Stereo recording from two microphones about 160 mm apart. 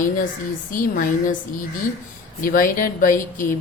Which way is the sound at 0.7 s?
55° left (ahead or behind).